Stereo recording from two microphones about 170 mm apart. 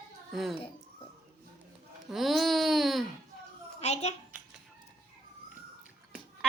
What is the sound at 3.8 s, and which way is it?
Speech, 40° left (ahead or behind).